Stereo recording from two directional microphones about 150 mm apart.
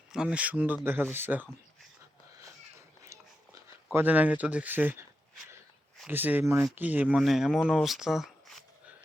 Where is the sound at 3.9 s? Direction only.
10° right (ahead or behind).